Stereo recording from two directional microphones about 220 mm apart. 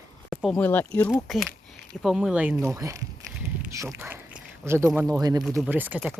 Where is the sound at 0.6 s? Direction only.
10° left (ahead or behind); by 3.1 s 15° right (ahead or behind).